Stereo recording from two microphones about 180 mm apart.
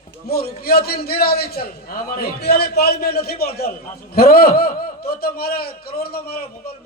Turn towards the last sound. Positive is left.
turn(degrees=60)  # may be behind; listen again after turning